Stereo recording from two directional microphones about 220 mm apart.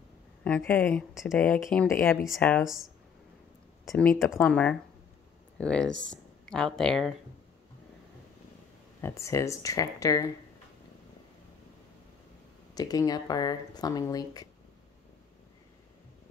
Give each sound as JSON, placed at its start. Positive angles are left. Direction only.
{"t": 0.4, "sound": "speech", "side_deg": 5}
{"t": 3.9, "sound": "speech", "side_deg": 5}
{"t": 9.0, "sound": "speech", "side_deg": 15}
{"t": 12.7, "sound": "speech", "side_deg": 15}